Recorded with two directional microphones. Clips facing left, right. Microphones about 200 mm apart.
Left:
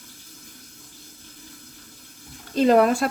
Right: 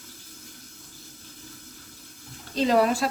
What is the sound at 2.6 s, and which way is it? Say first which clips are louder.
Speech: left 4 dB; 50° left (ahead or behind).